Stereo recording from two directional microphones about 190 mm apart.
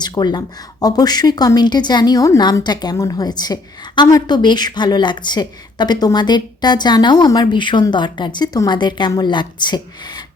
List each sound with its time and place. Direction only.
0.0 s speech: 20° left (ahead or behind)